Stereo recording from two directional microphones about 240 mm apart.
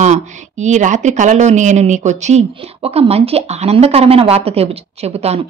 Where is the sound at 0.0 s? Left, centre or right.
Right.